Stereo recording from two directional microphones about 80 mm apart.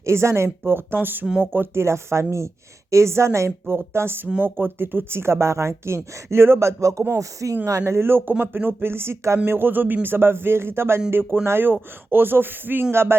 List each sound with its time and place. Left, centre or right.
0.0 s speech: right